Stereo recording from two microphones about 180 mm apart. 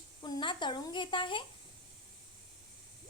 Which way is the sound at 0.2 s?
25° left (ahead or behind).